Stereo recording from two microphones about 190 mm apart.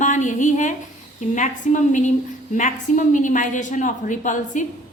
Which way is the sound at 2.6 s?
40° left (ahead or behind).